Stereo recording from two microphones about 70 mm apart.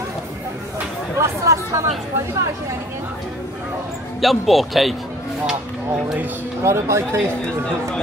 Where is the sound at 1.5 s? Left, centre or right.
Right.